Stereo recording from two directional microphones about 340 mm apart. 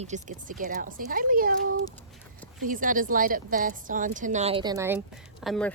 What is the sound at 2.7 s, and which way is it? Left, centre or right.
A woman's voice, right.